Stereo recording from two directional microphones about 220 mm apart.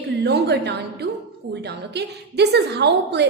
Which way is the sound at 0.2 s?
50° right (ahead or behind).